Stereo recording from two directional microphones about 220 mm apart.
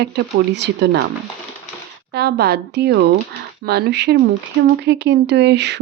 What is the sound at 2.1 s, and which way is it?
Speech, 45° right (ahead or behind).